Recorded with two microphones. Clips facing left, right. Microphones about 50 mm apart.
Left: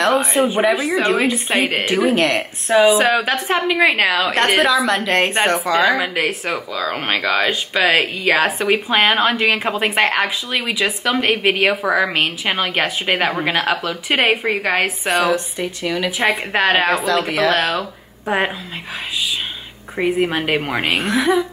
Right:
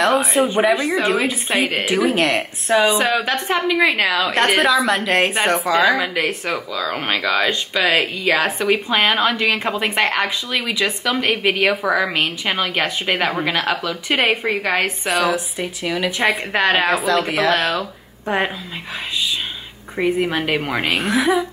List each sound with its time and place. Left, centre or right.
0.0 s speech: centre
3.7 s a woman's voice: centre
4.3 s a woman's voice: centre
14.6 s a woman's voice: left
15.0 s speech: centre
20.0 s a woman's voice: centre